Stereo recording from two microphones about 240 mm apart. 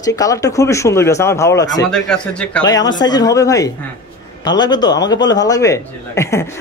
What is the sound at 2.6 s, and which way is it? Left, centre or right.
A man's voice, centre.